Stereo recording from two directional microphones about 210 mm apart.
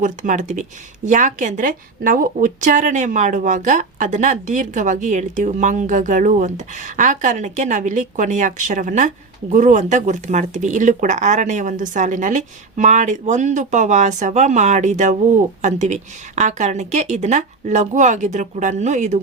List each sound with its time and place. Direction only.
0.0 s a woman's voice: 35° right (ahead or behind)